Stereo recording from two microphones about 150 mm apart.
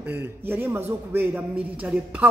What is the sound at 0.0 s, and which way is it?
A man's voice, 15° right (ahead or behind).